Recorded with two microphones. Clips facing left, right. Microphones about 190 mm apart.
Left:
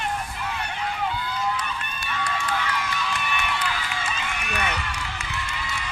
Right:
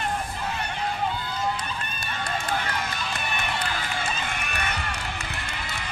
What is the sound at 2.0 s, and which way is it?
Crowd, 50° right (ahead or behind).